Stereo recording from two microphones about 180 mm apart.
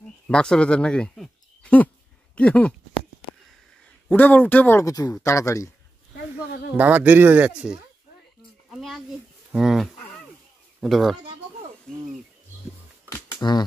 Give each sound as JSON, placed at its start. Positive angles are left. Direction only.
{"t": 0.3, "sound": "speech", "side_deg": 5}
{"t": 4.1, "sound": "speech", "side_deg": 10}
{"t": 6.1, "sound": "a sound", "side_deg": 60}
{"t": 6.8, "sound": "speech", "side_deg": -10}
{"t": 8.6, "sound": "a sound", "side_deg": 0}
{"t": 9.5, "sound": "livestock", "side_deg": 0}
{"t": 10.8, "sound": "speech", "side_deg": 0}
{"t": 13.1, "sound": "computer keyboard", "side_deg": 20}